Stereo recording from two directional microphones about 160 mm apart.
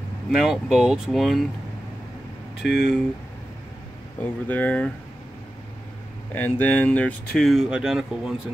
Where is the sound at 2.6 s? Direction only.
5° right (ahead or behind).